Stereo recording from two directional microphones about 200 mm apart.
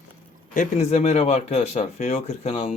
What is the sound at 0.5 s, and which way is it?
Speech, 35° left (ahead or behind).